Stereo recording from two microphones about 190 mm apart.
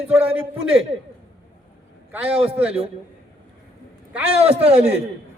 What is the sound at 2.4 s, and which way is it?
Speech, 30° right (ahead or behind).